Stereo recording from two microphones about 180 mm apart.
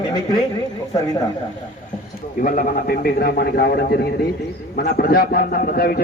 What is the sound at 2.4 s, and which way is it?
A man's voice, 50° left (ahead or behind).